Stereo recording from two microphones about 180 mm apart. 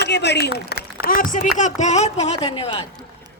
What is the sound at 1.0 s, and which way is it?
Speech, 50° left (ahead or behind).